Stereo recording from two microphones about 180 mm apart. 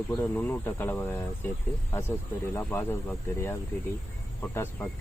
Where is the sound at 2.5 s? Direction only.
15° left (ahead or behind).